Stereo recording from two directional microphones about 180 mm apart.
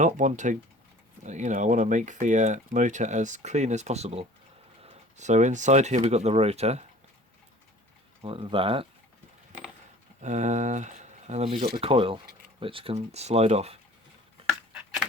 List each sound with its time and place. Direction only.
0.0 s speech: 45° right (ahead or behind)
8.2 s speech: 30° right (ahead or behind)
10.2 s speech: 40° right (ahead or behind)
14.4 s a sound: 30° right (ahead or behind)